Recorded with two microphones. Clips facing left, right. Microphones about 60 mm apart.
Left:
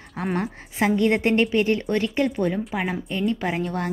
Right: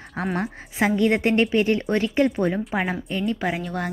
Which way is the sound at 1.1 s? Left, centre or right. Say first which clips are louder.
Even; centre.